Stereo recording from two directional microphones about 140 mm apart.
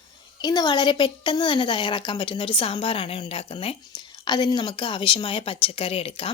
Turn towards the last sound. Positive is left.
turn(degrees=40)  # may be behind; listen again after turning